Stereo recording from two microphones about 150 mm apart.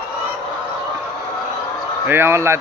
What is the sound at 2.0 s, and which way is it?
Speech, 15° right (ahead or behind).